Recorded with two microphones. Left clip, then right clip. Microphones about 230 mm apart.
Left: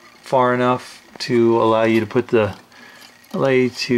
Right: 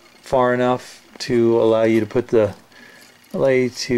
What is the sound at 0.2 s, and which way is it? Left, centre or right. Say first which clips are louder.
Speech: left 1 dB; centre.